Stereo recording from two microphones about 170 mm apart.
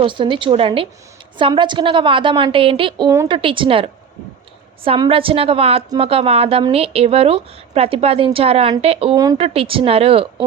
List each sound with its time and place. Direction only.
0.0 s a woman's voice: 30° right (ahead or behind)
5.0 s a woman's voice: 35° right (ahead or behind)